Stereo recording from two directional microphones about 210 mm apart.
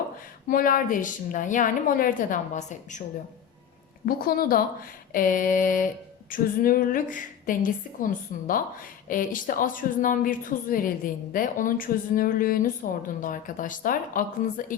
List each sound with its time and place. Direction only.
0.4 s a woman's voice: 40° left (ahead or behind)
4.0 s a woman's voice: 45° left (ahead or behind)